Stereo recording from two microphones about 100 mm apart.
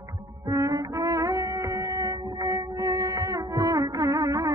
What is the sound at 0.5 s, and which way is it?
Music, 35° right (ahead or behind).